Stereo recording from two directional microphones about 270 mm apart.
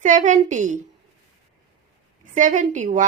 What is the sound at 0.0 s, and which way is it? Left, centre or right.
Speech, right.